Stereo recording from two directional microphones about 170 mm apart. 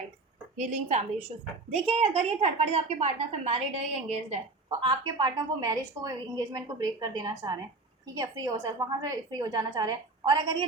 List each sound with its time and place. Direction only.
0.5 s a woman's voice: 45° right (ahead or behind)
4.8 s a woman's voice: 25° right (ahead or behind)